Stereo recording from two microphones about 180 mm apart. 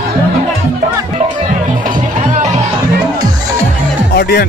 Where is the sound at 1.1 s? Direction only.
40° right (ahead or behind).